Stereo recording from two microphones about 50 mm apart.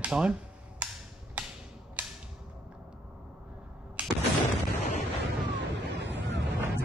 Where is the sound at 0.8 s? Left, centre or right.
Right.